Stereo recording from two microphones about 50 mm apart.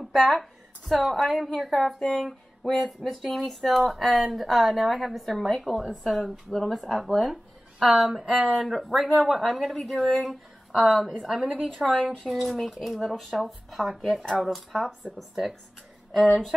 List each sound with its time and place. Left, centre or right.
0.1 s a woman's voice: centre
11.9 s a woman's voice: centre
12.3 s speech: centre
13.1 s a woman's voice: centre
13.4 s speech: centre